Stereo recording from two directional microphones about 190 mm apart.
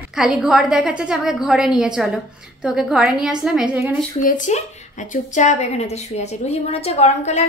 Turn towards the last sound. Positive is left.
turn(degrees=35)  # may be behind; listen again after turning